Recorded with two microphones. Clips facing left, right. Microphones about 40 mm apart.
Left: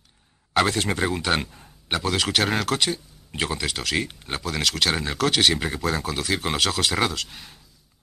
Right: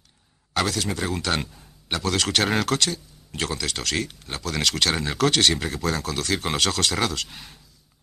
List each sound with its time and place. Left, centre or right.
0.5 s speech: left
1.0 s speech: centre
2.8 s speech: centre
4.0 s speech: left
4.4 s speech: centre
7.2 s speech: centre